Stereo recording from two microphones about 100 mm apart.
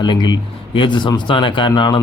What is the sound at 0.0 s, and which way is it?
Speech, 50° left (ahead or behind).